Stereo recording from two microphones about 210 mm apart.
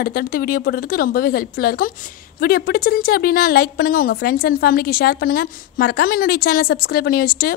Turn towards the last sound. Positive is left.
turn(degrees=45)  # may be behind; listen again after turning